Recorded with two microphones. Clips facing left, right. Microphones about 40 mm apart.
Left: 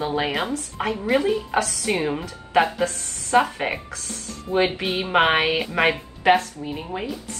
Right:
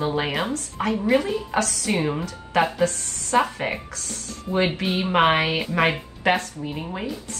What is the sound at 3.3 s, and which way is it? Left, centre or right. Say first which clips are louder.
Speech: left 2 dB; centre.